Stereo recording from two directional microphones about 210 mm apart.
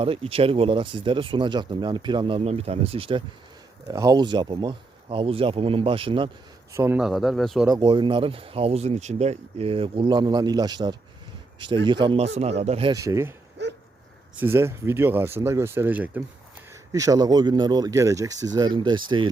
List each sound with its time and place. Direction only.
0.0 s speech: 25° right (ahead or behind)
6.7 s speech: 15° right (ahead or behind)
7.0 s a man's voice: centre (ahead or behind)
7.7 s speech: 20° right (ahead or behind)
12.9 s speech: 15° right (ahead or behind)
14.3 s speech: 10° right (ahead or behind)